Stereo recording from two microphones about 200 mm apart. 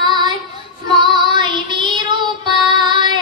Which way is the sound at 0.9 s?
20° right (ahead or behind).